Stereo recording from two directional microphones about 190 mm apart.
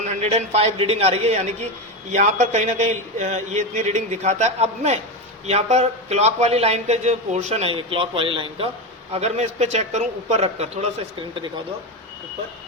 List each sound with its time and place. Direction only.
0.1 s a man's voice: 35° right (ahead or behind)